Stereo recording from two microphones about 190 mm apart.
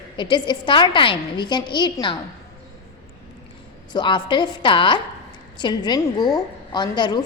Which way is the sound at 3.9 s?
25° left (ahead or behind).